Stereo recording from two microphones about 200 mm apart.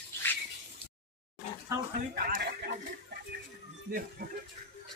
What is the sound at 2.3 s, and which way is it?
Speech, 55° right (ahead or behind).